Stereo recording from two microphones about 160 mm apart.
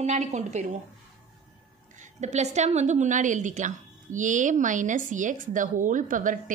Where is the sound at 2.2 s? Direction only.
45° right (ahead or behind).